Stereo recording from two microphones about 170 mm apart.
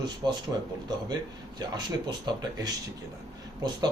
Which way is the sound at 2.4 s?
25° right (ahead or behind).